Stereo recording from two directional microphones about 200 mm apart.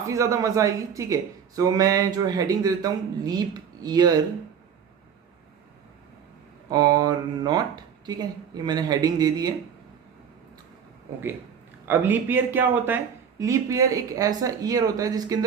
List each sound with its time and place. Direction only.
0.1 s speech: 15° right (ahead or behind)
6.7 s speech: 20° right (ahead or behind)
11.9 s speech: 10° right (ahead or behind)